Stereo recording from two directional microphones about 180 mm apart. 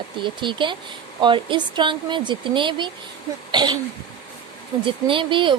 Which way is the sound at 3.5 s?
25° right (ahead or behind).